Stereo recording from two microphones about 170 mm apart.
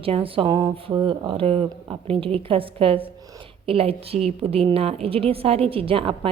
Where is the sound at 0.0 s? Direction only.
35° right (ahead or behind).